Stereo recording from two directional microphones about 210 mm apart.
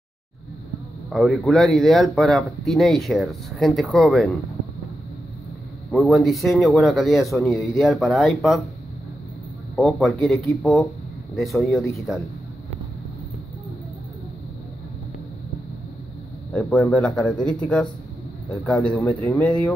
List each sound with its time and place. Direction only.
1.1 s speech: centre (ahead or behind)
5.9 s speech: centre (ahead or behind)
9.8 s speech: centre (ahead or behind)
12.1 s speech: centre (ahead or behind)
16.5 s speech: 5° left (ahead or behind)